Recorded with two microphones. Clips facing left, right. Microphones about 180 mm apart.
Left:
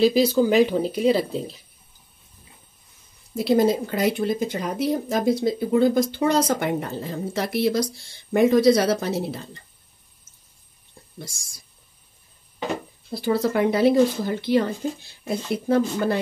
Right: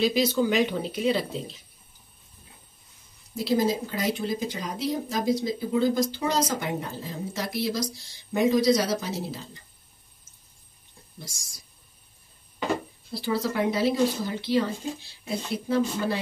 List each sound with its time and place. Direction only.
0.0 s speech: 30° left (ahead or behind)
3.3 s speech: 60° left (ahead or behind)
13.1 s speech: 50° left (ahead or behind)